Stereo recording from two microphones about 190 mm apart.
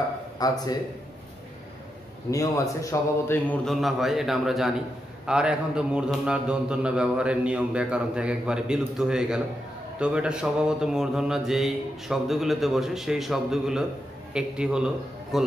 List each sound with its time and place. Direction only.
0.4 s speech: 20° left (ahead or behind)
2.3 s a man's voice: 15° left (ahead or behind); by 15.5 s centre (ahead or behind)